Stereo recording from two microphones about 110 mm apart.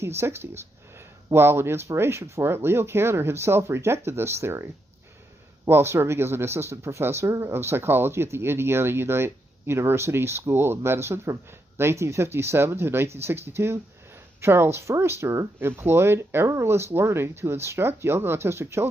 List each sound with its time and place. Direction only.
0.0 s speech: 25° right (ahead or behind)
5.7 s speech: 25° right (ahead or behind)